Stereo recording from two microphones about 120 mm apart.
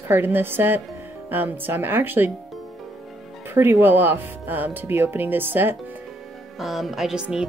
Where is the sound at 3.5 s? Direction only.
15° right (ahead or behind).